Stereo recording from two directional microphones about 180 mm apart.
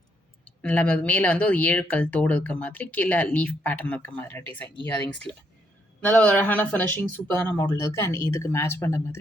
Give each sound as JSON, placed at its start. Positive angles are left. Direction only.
{"t": 0.4, "sound": "speech", "side_deg": 5}
{"t": 6.0, "sound": "speech", "side_deg": 10}